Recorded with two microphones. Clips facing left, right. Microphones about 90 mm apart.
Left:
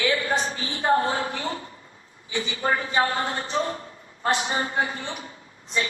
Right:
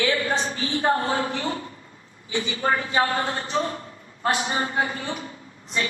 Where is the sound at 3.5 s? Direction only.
30° left (ahead or behind).